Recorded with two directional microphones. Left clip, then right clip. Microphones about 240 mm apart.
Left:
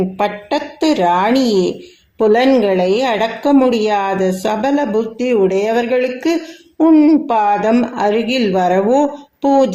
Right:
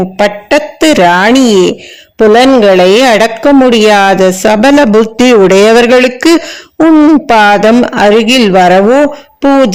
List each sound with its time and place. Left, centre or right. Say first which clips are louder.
0.2 s speech: right 12 dB; right
7.3 s speech: right 9 dB; right